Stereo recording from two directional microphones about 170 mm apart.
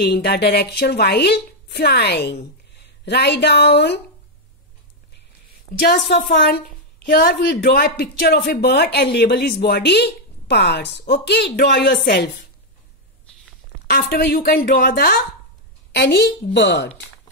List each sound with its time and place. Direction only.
0.0 s speech: 75° left (ahead or behind)
5.8 s speech: 75° left (ahead or behind)
7.1 s speech: 65° left (ahead or behind)
13.9 s speech: 70° left (ahead or behind)
15.9 s a woman's voice: 80° left